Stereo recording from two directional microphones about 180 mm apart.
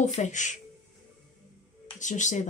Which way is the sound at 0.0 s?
40° left (ahead or behind).